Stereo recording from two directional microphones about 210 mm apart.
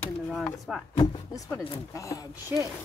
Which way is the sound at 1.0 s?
15° left (ahead or behind).